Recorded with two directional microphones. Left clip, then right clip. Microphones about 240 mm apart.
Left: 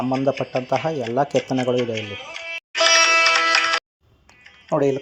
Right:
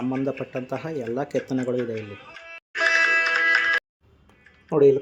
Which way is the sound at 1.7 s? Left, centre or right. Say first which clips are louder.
Left 5 dB; left.